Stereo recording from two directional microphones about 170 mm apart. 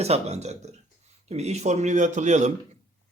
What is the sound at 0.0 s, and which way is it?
A man's voice, 40° right (ahead or behind).